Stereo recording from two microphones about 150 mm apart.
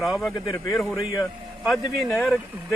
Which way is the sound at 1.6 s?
Centre (ahead or behind).